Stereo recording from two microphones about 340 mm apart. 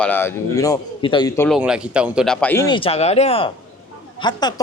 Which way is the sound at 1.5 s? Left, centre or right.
Centre.